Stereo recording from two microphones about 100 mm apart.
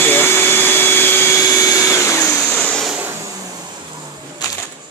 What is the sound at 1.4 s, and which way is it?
Vacuum cleaner, 35° left (ahead or behind).